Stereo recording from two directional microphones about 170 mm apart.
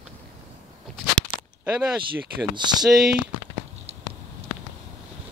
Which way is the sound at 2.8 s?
5° right (ahead or behind).